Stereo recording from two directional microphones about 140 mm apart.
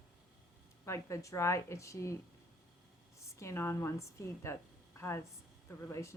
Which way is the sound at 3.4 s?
20° left (ahead or behind).